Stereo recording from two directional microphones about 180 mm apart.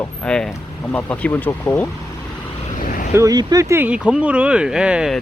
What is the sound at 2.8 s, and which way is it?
Vehicle, 50° left (ahead or behind).